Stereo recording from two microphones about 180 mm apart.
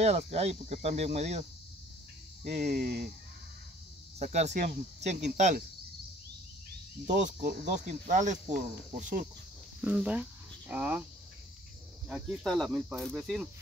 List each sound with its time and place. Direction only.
0.0 s speech: 35° right (ahead or behind)
2.4 s cricket: 55° right (ahead or behind)
4.2 s speech: 40° right (ahead or behind)
7.1 s speech: 45° right (ahead or behind)
9.8 s speech: 5° right (ahead or behind)
12.1 s speech: centre (ahead or behind)